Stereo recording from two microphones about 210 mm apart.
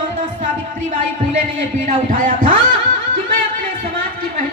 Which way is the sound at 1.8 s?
40° right (ahead or behind).